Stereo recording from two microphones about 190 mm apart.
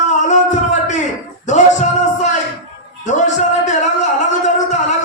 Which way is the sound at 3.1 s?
40° left (ahead or behind).